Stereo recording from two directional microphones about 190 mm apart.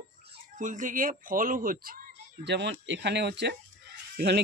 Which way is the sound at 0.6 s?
45° right (ahead or behind).